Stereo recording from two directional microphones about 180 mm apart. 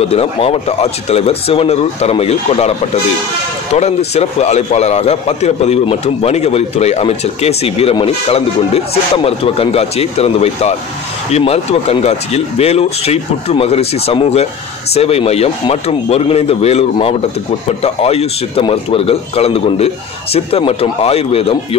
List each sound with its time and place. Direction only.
0.1 s a man's voice: 30° left (ahead or behind)
3.7 s a man's voice: 35° left (ahead or behind)